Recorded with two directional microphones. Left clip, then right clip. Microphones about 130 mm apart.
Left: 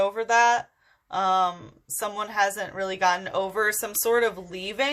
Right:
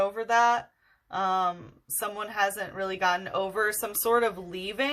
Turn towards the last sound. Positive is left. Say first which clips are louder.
# left 3 dB
turn(degrees=10)  # may be behind; listen again after turning